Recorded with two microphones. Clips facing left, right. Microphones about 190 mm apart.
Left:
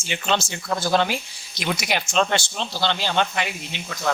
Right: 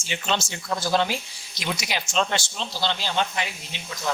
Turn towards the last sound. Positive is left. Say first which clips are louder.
# left 4 dB
turn(degrees=60)  # may be behind; listen again after turning